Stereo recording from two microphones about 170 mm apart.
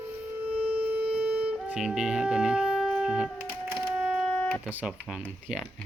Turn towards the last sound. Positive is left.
turn(degrees=-5)  # may be behind; listen again after turning